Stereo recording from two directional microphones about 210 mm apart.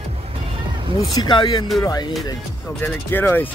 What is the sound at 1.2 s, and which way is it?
Speech, 20° left (ahead or behind).